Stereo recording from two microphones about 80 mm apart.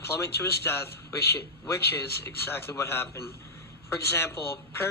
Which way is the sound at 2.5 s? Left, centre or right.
Left.